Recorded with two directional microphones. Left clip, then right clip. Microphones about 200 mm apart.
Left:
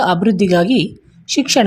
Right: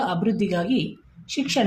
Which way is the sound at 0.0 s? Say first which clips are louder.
Left 10 dB; 40° left (ahead or behind).